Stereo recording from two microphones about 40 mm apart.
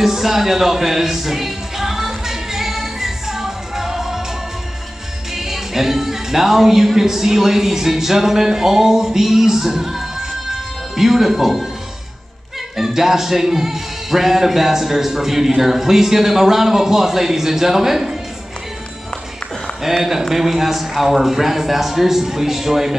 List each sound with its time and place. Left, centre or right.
0.0 s music: centre
5.3 s a man's voice: centre
12.7 s a man's voice: centre
20.0 s a man's voice: centre